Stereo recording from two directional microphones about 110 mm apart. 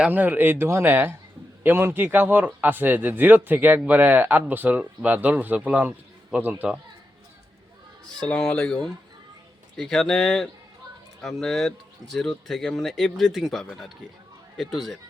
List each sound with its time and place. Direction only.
0.0 s a man's voice: 15° right (ahead or behind)
8.2 s speech: 10° left (ahead or behind)